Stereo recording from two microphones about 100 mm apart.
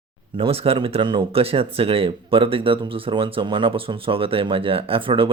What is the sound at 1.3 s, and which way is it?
Speech, 75° right (ahead or behind).